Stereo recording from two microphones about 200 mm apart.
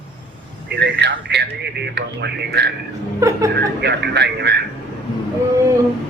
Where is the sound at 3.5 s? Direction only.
55° right (ahead or behind).